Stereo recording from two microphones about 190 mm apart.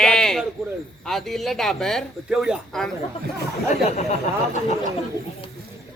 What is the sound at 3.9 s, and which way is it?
Speech, 35° left (ahead or behind).